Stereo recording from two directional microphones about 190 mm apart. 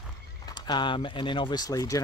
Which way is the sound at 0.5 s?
25° left (ahead or behind).